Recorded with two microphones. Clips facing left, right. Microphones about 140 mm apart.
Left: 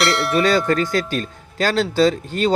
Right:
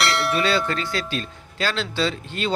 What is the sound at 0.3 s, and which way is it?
Speech, 45° left (ahead or behind).